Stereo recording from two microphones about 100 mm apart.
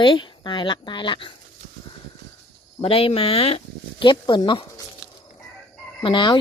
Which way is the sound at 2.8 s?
70° left (ahead or behind).